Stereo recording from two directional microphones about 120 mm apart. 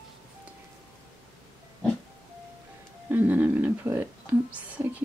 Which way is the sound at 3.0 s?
15° right (ahead or behind).